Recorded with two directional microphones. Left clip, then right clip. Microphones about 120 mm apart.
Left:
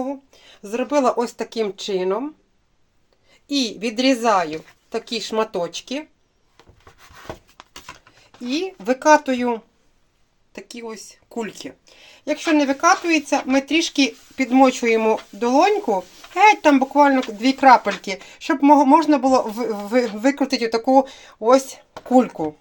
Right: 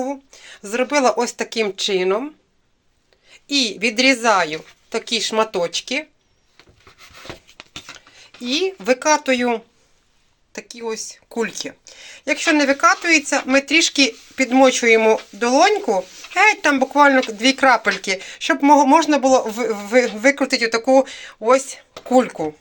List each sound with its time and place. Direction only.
0.0 s speech: 25° left (ahead or behind)
1.4 s a woman's voice: 20° left (ahead or behind)
8.4 s speech: 20° left (ahead or behind)
10.5 s a woman's voice: 15° left (ahead or behind); by 15.7 s 40° left (ahead or behind)
16.3 s speech: 30° left (ahead or behind)